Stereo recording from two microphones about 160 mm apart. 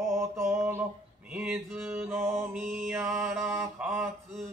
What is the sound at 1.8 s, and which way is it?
Mantra, 15° right (ahead or behind).